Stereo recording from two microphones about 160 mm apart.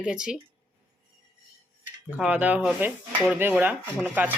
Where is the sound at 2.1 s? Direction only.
5° right (ahead or behind).